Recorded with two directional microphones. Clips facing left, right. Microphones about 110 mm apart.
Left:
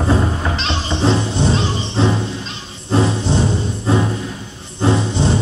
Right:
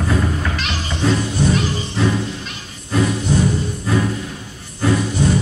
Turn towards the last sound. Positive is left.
turn(degrees=25)  # may be behind; listen again after turning